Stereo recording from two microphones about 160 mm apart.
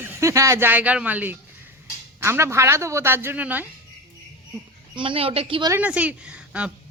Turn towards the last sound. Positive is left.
turn(degrees=-10)  # may be behind; listen again after turning